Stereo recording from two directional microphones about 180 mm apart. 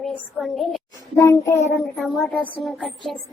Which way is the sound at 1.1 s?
15° left (ahead or behind).